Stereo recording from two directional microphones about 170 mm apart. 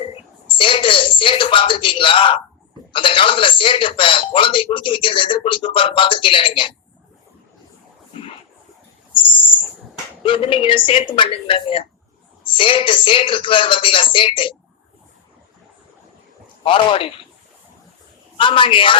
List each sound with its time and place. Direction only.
0.4 s speech: 30° left (ahead or behind)
9.1 s owl: 30° left (ahead or behind)
10.2 s speech: 30° left (ahead or behind)
16.6 s speech: 30° left (ahead or behind)
18.3 s speech: 30° left (ahead or behind)